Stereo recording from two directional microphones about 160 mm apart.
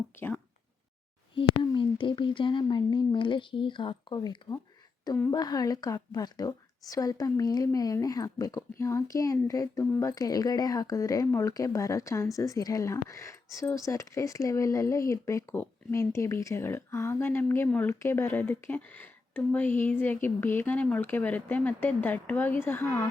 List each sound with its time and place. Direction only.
0.1 s speech: 15° left (ahead or behind)
1.4 s a woman's voice: 30° left (ahead or behind); by 23.0 s 15° left (ahead or behind)